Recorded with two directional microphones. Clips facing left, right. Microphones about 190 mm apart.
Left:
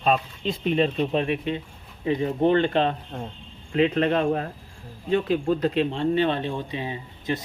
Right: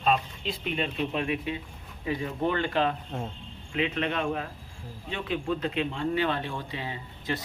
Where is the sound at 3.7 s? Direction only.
40° left (ahead or behind).